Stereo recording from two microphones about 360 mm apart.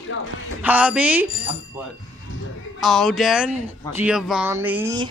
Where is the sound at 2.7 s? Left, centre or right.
Centre.